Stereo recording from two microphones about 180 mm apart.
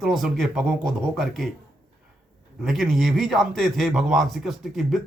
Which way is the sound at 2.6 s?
Centre (ahead or behind).